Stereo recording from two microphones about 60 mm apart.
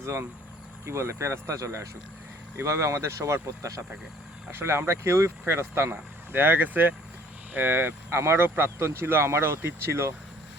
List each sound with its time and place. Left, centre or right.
0.0 s speech: right
8.2 s speech: right